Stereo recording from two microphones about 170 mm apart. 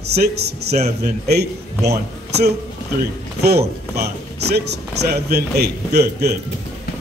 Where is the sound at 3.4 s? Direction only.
70° right (ahead or behind).